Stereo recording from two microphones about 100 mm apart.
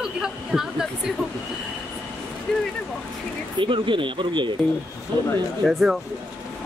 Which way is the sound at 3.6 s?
55° right (ahead or behind).